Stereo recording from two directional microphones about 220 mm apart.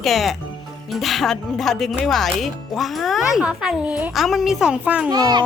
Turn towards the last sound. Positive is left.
turn(degrees=-20)  # may be behind; listen again after turning